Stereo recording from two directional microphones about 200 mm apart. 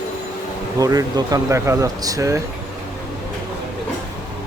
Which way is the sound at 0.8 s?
15° right (ahead or behind).